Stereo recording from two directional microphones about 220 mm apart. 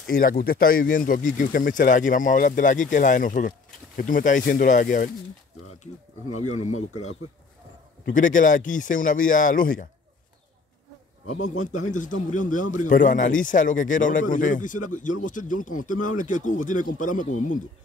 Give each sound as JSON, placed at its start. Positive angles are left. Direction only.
{"t": 0.0, "sound": "speech", "side_deg": 40}
{"t": 6.3, "sound": "speech", "side_deg": 85}
{"t": 8.0, "sound": "speech", "side_deg": 35}
{"t": 11.4, "sound": "speech", "side_deg": 35}